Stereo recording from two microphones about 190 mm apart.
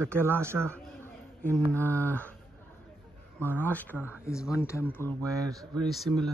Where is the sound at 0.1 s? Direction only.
10° right (ahead or behind).